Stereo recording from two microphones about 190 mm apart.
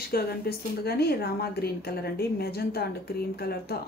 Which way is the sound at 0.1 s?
55° left (ahead or behind).